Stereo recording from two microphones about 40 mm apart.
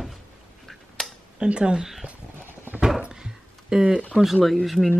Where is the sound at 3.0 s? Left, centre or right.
Right.